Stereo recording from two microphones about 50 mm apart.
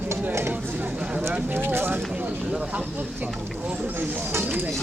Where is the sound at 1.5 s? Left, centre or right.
Right.